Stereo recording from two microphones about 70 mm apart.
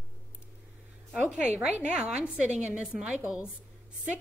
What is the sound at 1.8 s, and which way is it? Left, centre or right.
A woman's voice, centre.